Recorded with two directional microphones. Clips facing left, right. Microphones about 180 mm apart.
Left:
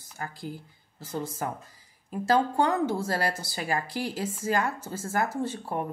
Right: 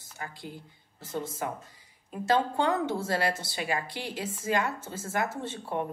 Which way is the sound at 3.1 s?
40° left (ahead or behind).